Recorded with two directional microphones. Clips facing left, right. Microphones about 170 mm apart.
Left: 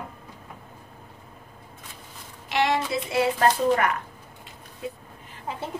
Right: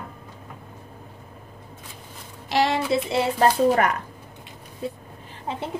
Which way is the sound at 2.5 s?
30° right (ahead or behind).